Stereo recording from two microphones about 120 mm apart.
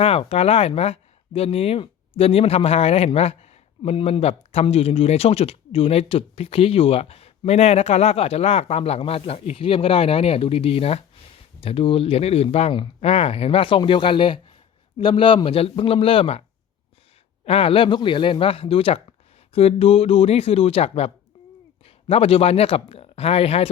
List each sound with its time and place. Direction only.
0.0 s speech: 55° left (ahead or behind)
17.4 s speech: 55° left (ahead or behind)